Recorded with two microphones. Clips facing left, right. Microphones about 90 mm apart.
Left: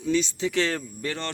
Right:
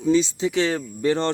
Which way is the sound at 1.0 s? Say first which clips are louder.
Right 10 dB; 25° right (ahead or behind).